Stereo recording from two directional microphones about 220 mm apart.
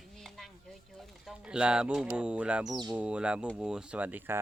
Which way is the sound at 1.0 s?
Centre (ahead or behind).